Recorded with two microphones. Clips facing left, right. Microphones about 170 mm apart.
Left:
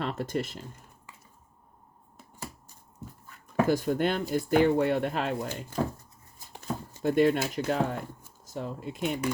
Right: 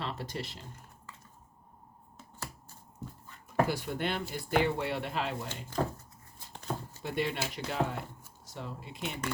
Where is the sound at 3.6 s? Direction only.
45° left (ahead or behind).